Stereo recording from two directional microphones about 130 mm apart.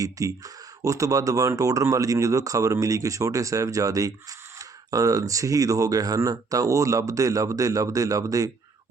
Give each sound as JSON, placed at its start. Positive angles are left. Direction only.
{"t": 0.0, "sound": "speech", "side_deg": -25}